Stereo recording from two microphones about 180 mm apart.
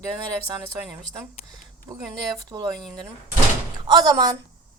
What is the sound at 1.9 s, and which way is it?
Speech, 25° right (ahead or behind).